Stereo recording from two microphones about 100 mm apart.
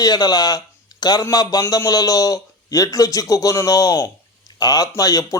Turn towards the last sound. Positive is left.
turn(degrees=35)  # may be behind; listen again after turning